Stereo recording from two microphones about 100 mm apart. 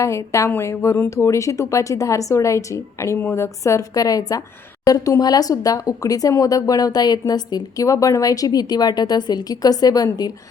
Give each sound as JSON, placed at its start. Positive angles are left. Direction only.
{"t": 0.0, "sound": "speech", "side_deg": 30}